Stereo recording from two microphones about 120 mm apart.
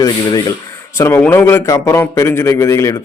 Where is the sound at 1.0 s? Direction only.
20° left (ahead or behind).